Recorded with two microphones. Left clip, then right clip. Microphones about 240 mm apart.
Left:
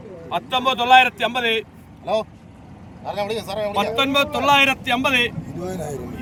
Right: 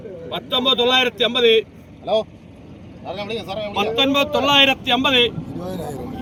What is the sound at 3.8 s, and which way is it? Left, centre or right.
A man's voice, left.